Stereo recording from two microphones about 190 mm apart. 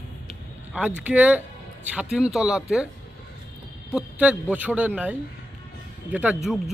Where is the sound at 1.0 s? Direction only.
5° right (ahead or behind).